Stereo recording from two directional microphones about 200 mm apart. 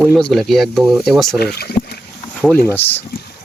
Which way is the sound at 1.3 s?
50° left (ahead or behind).